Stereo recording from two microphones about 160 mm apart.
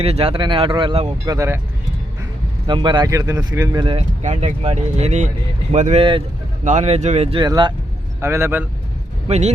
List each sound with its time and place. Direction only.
0.0 s speech: 35° right (ahead or behind)
1.2 s a man's voice: 20° right (ahead or behind)
2.6 s speech: 30° right (ahead or behind)
3.8 s speech: 45° right (ahead or behind)
7.4 s a man's voice: 25° right (ahead or behind)
9.2 s speech: 40° right (ahead or behind)